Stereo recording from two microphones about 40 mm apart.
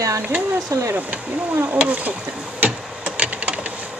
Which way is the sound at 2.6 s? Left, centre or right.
Right.